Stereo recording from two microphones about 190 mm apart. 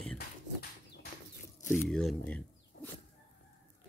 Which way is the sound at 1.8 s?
5° left (ahead or behind).